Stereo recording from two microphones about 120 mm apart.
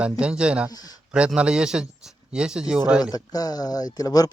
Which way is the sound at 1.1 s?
10° right (ahead or behind).